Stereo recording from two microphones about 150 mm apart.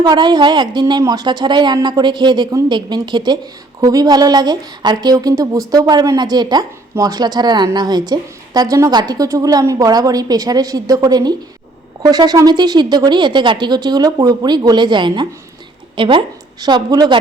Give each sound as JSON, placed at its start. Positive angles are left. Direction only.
{"t": 0.0, "sound": "a woman's voice", "side_deg": -30}